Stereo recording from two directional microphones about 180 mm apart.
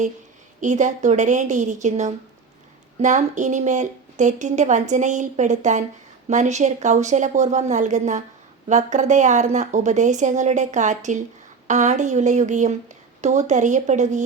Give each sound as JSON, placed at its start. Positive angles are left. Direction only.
{"t": 0.6, "sound": "a woman's voice", "side_deg": -40}